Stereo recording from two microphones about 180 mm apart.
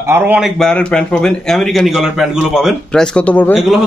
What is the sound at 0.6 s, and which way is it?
Speech, 5° left (ahead or behind).